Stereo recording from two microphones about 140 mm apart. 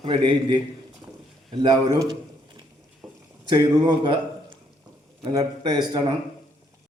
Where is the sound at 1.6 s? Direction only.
30° right (ahead or behind).